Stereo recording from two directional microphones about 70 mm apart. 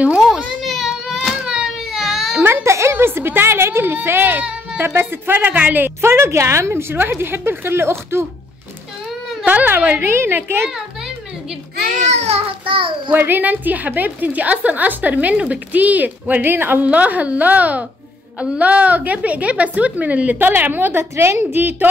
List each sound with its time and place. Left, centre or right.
0.7 s baby cry: centre
2.4 s a woman's voice: right
9.4 s a woman's voice: right
10.0 s a woman's voice: right
13.1 s a woman's voice: right